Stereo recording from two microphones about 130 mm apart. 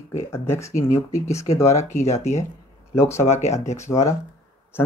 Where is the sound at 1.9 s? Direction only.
60° left (ahead or behind).